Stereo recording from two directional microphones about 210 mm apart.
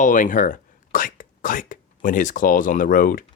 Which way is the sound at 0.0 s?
40° left (ahead or behind).